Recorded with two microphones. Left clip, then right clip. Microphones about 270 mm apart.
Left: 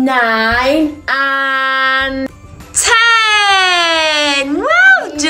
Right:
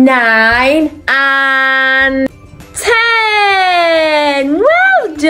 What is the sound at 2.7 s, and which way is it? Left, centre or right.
Wail, centre.